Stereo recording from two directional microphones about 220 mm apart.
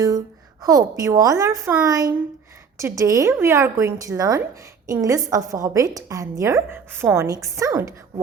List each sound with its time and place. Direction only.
0.6 s a woman's voice: 15° right (ahead or behind)